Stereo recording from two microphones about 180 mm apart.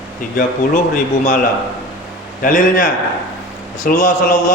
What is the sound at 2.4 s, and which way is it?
A man's voice, 45° left (ahead or behind).